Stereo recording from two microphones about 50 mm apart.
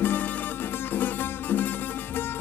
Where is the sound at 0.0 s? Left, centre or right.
Left.